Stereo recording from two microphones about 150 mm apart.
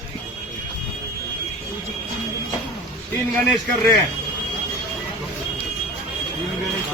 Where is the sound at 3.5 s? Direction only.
Centre (ahead or behind).